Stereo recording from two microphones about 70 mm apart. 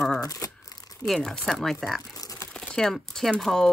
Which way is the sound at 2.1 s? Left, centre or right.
Left.